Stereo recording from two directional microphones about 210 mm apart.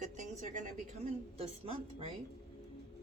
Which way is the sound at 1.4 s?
25° right (ahead or behind).